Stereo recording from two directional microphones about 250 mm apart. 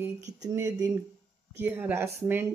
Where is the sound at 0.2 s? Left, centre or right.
Right.